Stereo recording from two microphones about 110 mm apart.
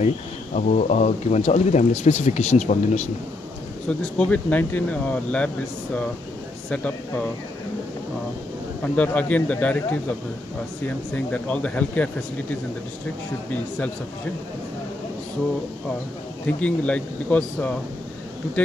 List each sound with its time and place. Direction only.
0.6 s speech: 90° left
4.2 s speech: 15° left (ahead or behind)
6.7 s speech: 10° left (ahead or behind)
8.8 s speech: 15° left (ahead or behind)
11.1 s speech: 10° left (ahead or behind)
16.4 s speech: 10° left (ahead or behind)